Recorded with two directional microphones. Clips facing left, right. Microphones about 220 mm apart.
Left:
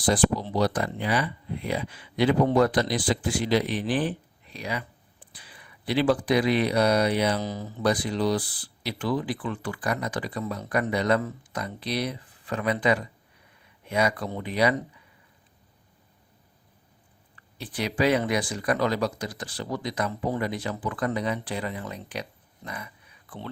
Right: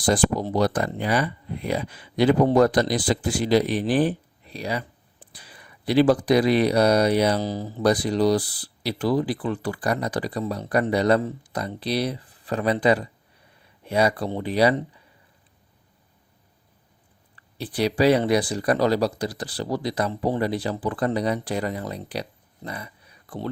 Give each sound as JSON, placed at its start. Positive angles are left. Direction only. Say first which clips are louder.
{"t": 0.0, "sound": "speech", "louder": "right 2 dB", "side_deg": -45}
{"t": 17.6, "sound": "speech", "louder": "right 5 dB", "side_deg": -35}